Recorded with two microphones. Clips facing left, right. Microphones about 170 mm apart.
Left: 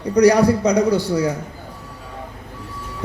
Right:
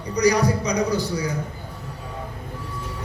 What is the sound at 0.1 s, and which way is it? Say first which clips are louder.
A man's voice: left 6 dB; 65° left (ahead or behind).